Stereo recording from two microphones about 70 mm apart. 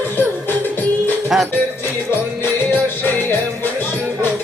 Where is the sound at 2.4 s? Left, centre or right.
Left.